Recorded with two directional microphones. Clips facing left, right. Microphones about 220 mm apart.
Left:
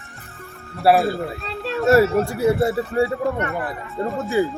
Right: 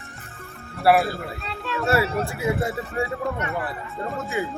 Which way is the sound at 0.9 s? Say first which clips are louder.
Left 2 dB; 25° left (ahead or behind).